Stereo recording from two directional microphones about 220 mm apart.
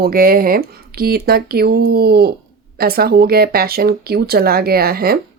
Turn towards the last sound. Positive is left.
turn(degrees=-45)  # may be behind; listen again after turning